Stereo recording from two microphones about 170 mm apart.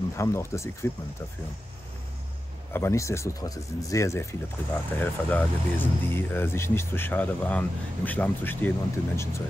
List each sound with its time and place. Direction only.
0.2 s speech: 15° left (ahead or behind)
2.7 s speech: 15° left (ahead or behind)